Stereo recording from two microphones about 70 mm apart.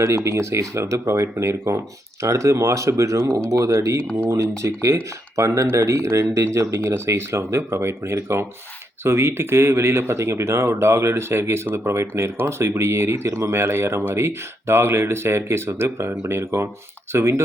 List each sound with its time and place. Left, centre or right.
0.3 s speech: right